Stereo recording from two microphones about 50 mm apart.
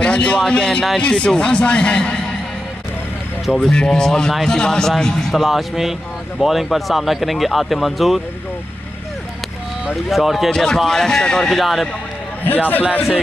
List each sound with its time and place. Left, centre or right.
0.0 s a man's voice: left
3.6 s a man's voice: centre
5.3 s speech: centre
10.0 s speech: centre
10.5 s a man's voice: centre
11.5 s speech: centre
12.4 s a man's voice: left